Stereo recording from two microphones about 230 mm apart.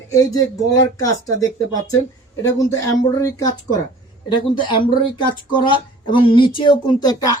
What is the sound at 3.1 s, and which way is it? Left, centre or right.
Speech, centre.